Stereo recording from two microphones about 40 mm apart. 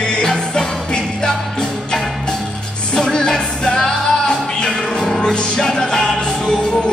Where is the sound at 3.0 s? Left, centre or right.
Centre.